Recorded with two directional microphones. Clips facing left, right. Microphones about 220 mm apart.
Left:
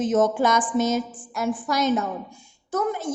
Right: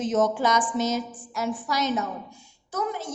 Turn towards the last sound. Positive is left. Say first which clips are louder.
# left 5 dB
turn(degrees=50)  # may be behind; listen again after turning